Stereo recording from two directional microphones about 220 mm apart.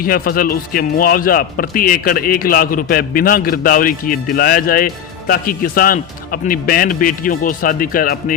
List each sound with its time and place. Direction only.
0.0 s speech: 40° left (ahead or behind)